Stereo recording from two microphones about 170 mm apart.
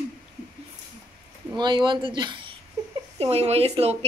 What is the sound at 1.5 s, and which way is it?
Speech, 25° right (ahead or behind).